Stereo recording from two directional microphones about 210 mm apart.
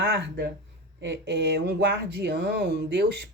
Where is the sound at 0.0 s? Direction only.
50° right (ahead or behind).